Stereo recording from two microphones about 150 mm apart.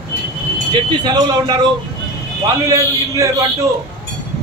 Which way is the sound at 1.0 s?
30° right (ahead or behind).